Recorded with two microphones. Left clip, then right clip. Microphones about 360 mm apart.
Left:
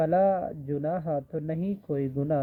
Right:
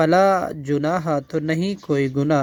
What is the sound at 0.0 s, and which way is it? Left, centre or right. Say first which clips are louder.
Speech: right 8 dB; right.